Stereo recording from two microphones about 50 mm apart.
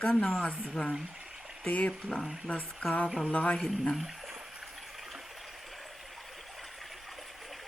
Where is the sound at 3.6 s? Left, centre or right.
Centre.